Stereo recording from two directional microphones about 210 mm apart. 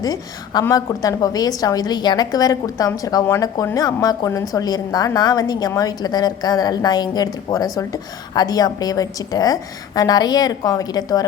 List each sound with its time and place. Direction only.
0.0 s a woman's voice: 15° left (ahead or behind)